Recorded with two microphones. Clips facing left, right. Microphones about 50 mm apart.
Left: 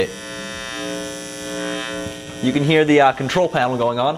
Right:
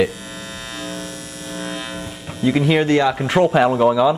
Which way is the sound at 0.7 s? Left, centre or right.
Centre.